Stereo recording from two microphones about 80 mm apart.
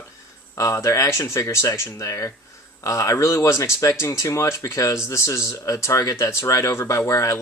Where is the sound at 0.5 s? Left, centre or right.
Left.